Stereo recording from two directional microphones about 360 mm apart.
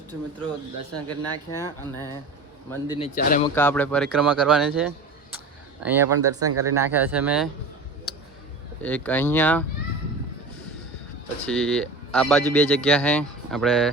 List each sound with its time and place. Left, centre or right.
1.5 s speech: centre
3.2 s speech: left
3.5 s speech: centre
6.4 s speech: right
6.7 s speech: centre
8.1 s music: centre
8.8 s speech: centre
11.4 s speech: centre